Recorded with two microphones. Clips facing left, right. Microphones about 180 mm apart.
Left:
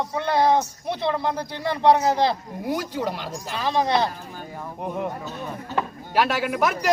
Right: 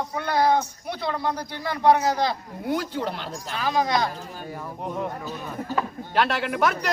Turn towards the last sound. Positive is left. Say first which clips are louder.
# left 1 dB
turn(degrees=5)  # may be behind; listen again after turning